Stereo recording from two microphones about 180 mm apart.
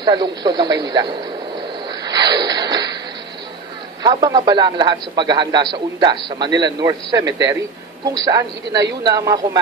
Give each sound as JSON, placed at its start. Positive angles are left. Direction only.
{"t": 0.0, "sound": "a man's voice", "side_deg": -25}
{"t": 2.0, "sound": "a sound", "side_deg": -20}
{"t": 4.0, "sound": "a man's voice", "side_deg": -25}